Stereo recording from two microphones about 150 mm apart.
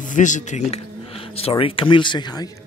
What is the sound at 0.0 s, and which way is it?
Speech, 55° left (ahead or behind).